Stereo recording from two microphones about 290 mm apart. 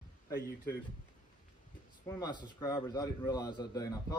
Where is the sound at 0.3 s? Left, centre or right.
Left.